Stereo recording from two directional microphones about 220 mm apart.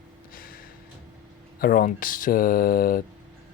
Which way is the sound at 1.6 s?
40° left (ahead or behind).